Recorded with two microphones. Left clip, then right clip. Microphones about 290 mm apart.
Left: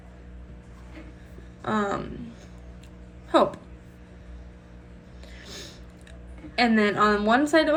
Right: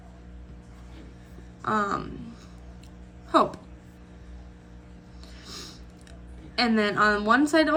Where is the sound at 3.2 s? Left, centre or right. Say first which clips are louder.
Left 1 dB; left.